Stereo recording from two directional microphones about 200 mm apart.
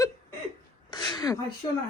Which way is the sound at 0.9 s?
20° left (ahead or behind).